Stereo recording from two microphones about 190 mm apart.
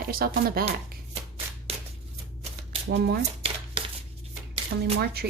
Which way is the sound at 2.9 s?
55° right (ahead or behind).